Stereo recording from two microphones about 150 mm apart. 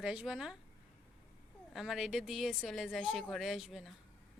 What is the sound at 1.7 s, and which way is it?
A woman's voice, centre (ahead or behind).